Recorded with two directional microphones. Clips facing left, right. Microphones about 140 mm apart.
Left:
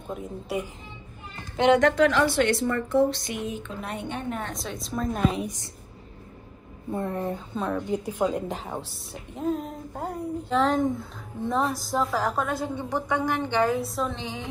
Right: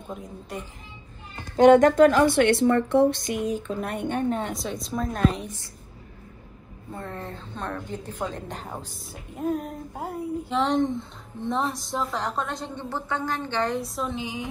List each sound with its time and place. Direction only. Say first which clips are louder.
0.1 s speech: left 5 dB; 5° left (ahead or behind)
1.6 s a woman's voice: right 5 dB; 45° right (ahead or behind)
4.5 s a woman's voice: right 3 dB; centre (ahead or behind)
6.9 s a woman's voice: left 7 dB; 15° left (ahead or behind); by 14.2 s centre (ahead or behind)
14.2 s a woman's voice: right 2 dB; 10° right (ahead or behind)